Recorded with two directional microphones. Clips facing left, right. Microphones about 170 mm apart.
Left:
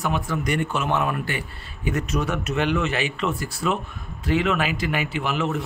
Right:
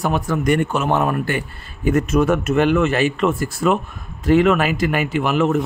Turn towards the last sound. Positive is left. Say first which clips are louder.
# right 7 dB
turn(degrees=-50)  # may be behind; listen again after turning